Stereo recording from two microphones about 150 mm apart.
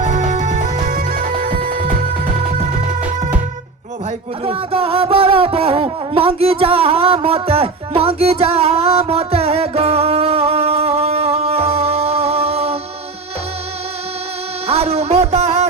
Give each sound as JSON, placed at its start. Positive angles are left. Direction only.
{"t": 0.0, "sound": "music", "side_deg": -55}
{"t": 4.4, "sound": "a sound", "side_deg": -40}
{"t": 14.7, "sound": "music", "side_deg": -45}